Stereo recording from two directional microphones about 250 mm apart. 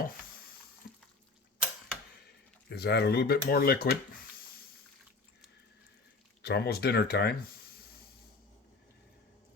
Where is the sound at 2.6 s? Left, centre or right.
Left.